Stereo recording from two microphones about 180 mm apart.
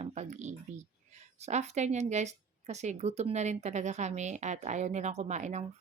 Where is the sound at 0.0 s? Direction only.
40° right (ahead or behind).